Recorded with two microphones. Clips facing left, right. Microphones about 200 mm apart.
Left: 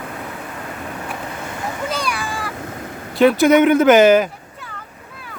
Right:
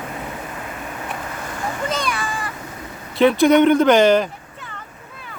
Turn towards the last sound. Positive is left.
turn(degrees=5)  # may be behind; listen again after turning